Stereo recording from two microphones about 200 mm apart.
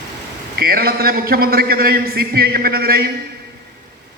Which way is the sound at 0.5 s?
50° right (ahead or behind).